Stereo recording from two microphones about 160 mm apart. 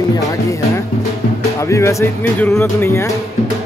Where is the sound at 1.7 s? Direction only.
20° left (ahead or behind).